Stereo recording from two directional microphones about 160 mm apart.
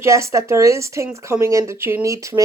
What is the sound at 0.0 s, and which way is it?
Speech, 20° right (ahead or behind).